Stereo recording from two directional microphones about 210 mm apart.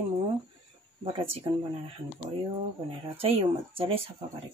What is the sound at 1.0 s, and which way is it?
Speech, 25° right (ahead or behind).